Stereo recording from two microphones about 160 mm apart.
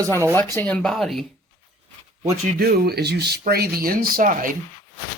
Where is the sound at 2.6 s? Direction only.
80° right; by 4.5 s 60° right (ahead or behind).